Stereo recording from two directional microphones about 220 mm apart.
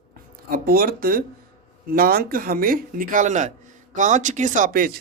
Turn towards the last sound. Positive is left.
turn(degrees=-40)  # may be behind; listen again after turning